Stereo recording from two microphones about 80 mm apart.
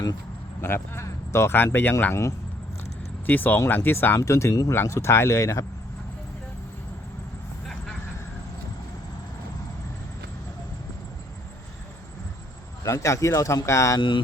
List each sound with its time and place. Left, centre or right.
0.6 s speech: left
3.2 s speech: left
4.2 s speech: left
12.8 s speech: left